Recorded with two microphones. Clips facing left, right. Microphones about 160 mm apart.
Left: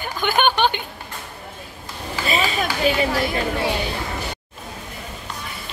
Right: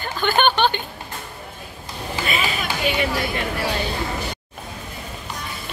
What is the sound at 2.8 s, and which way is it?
Speech, 35° left (ahead or behind).